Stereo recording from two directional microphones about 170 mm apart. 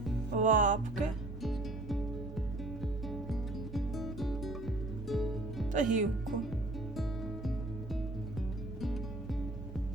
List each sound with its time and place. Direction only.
0.3 s music: 50° right (ahead or behind)
1.4 s music: centre (ahead or behind)
5.7 s speech: 50° right (ahead or behind)
6.9 s music: centre (ahead or behind)